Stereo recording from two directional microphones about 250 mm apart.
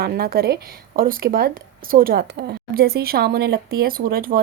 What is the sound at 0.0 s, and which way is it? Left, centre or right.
Speech, right.